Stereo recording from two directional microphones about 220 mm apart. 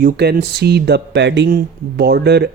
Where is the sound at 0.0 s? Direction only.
45° right (ahead or behind).